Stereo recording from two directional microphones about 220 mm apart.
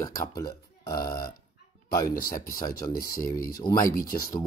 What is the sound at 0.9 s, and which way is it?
Speech, 40° left (ahead or behind).